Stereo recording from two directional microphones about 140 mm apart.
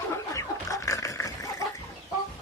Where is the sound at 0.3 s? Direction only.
25° left (ahead or behind).